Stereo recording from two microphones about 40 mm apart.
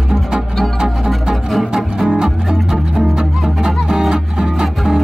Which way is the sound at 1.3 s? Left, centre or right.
Centre.